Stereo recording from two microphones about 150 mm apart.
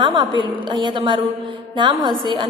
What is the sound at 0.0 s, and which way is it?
A woman's voice, 30° right (ahead or behind).